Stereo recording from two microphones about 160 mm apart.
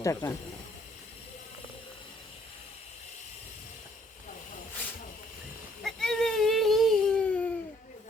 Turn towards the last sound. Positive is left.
turn(degrees=5)  # may be behind; listen again after turning